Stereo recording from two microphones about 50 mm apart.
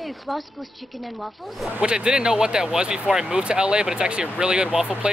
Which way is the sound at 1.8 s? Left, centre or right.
Centre.